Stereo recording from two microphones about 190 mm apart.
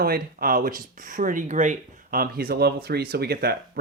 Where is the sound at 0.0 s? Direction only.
50° right (ahead or behind).